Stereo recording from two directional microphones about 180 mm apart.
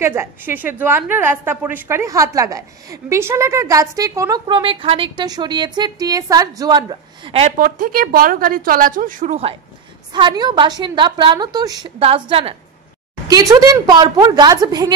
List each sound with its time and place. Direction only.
0.0 s a woman's voice: 15° right (ahead or behind); by 7.5 s 30° right (ahead or behind)
7.5 s a woman's voice: 50° right (ahead or behind)
10.1 s a woman's voice: 25° right (ahead or behind)
12.0 s a woman's voice: 30° right (ahead or behind)
13.3 s a woman's voice: 20° right (ahead or behind)